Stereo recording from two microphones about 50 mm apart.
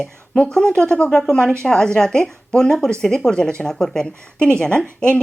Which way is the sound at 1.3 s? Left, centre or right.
Centre.